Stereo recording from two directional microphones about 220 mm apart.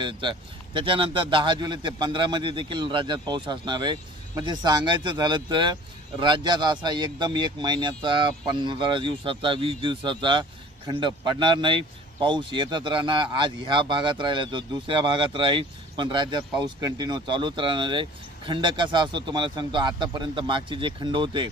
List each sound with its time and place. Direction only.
0.0 s speech: 20° right (ahead or behind)